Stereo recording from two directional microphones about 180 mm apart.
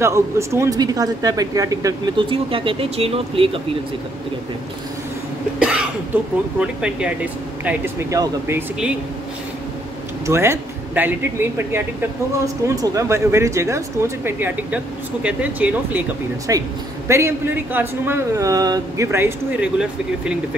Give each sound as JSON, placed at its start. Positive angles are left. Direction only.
{"t": 0.0, "sound": "speech", "side_deg": -15}
{"t": 5.6, "sound": "cough", "side_deg": -5}
{"t": 6.1, "sound": "speech", "side_deg": -10}
{"t": 10.2, "sound": "speech", "side_deg": -15}